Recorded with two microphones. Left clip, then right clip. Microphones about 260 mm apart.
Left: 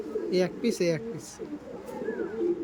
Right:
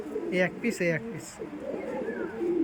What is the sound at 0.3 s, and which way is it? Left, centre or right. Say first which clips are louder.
Speech: left 1 dB; left.